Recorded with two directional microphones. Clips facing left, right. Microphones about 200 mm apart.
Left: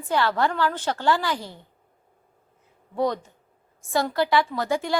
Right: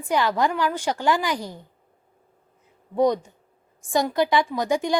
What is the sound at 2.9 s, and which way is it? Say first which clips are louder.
A woman's voice: right 4 dB; 15° right (ahead or behind).